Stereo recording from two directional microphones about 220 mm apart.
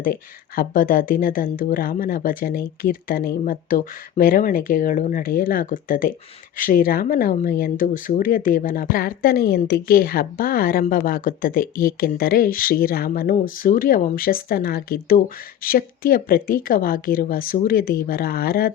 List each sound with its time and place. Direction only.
0.0 s speech: 40° left (ahead or behind)